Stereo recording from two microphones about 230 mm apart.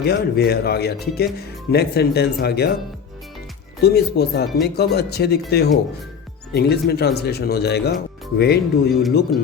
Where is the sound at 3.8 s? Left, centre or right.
Left.